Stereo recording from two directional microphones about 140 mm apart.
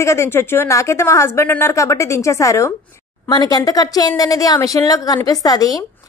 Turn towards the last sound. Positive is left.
turn(degrees=25)  # may be behind; listen again after turning